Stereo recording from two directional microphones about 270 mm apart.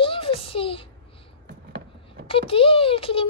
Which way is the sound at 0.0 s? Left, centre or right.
Centre.